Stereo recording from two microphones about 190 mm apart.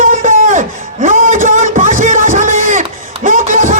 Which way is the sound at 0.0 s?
45° right (ahead or behind).